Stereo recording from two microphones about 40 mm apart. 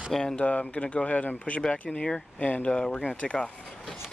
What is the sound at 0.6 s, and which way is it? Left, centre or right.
Speech, left.